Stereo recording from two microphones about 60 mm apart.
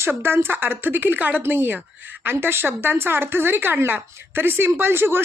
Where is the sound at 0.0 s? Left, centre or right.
Right.